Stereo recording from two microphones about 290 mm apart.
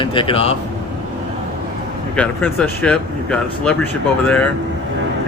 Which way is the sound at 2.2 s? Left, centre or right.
Centre.